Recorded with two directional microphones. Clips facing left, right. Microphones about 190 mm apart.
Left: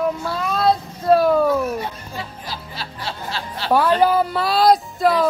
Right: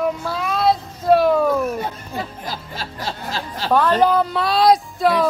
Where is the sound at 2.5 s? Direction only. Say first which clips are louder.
Right 2 dB; 45° right (ahead or behind).